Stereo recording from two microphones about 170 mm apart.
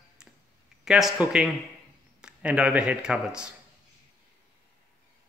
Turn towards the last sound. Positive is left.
turn(degrees=-5)  # may be behind; listen again after turning